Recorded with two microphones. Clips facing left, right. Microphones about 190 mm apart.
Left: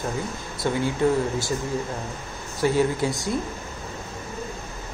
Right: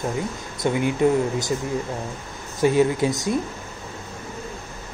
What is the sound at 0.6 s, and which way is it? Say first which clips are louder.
Speech: right 3 dB; 20° right (ahead or behind).